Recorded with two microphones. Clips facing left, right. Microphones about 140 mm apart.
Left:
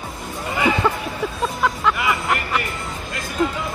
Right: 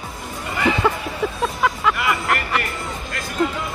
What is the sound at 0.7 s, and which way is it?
Speech, centre (ahead or behind).